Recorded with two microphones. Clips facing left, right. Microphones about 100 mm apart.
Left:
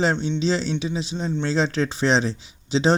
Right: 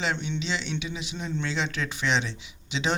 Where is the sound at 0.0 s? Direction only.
40° left (ahead or behind).